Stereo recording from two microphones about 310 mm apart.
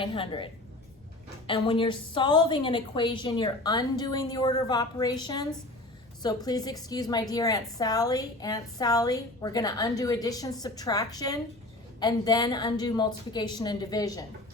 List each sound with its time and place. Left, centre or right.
0.0 s a woman's voice: centre